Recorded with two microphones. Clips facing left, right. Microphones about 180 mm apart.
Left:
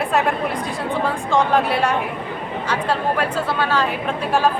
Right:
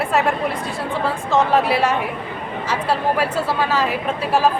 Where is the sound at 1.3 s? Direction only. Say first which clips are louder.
Right 1 dB; 5° right (ahead or behind).